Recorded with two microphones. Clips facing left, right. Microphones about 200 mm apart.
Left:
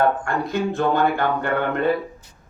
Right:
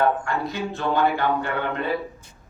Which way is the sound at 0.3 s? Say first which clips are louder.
Left 4 dB; 55° left (ahead or behind).